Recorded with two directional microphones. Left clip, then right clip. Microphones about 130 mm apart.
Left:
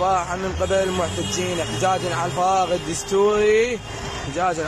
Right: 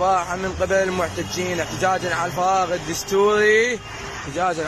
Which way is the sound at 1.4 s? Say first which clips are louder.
Right 1 dB; 20° left (ahead or behind).